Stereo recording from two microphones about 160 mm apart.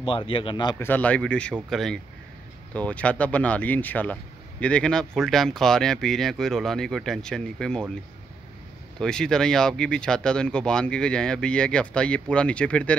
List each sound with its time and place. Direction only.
0.0 s speech: 30° left (ahead or behind)
0.7 s speech: 10° left (ahead or behind)
9.0 s speech: 5° left (ahead or behind)